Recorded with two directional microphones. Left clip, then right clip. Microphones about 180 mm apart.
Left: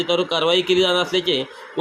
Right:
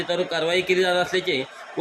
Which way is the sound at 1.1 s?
10° left (ahead or behind).